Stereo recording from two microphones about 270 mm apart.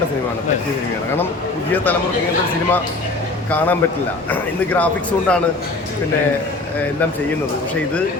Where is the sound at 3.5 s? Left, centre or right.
Centre.